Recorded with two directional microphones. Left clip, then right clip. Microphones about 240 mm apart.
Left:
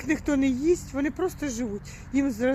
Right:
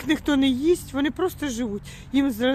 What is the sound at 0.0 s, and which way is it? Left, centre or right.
Speech, centre.